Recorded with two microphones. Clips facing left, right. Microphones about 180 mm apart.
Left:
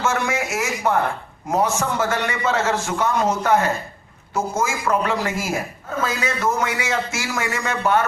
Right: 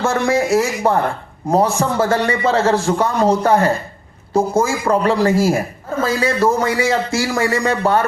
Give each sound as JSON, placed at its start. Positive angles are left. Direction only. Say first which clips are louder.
{"t": 0.0, "sound": "a man's voice", "louder": "right 6 dB", "side_deg": -35}